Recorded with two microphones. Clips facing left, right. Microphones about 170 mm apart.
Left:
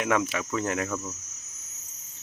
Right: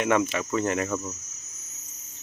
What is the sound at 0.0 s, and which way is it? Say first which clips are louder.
Cricket: right 3 dB; centre (ahead or behind).